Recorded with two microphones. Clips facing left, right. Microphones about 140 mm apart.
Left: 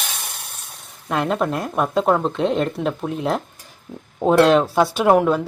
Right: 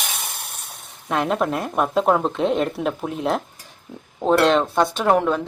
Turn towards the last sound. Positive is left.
turn(degrees=5)  # may be behind; listen again after turning